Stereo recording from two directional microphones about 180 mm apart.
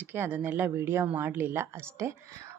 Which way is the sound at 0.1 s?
10° right (ahead or behind).